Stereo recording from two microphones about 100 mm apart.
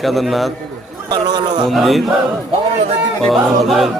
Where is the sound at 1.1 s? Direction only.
45° right (ahead or behind).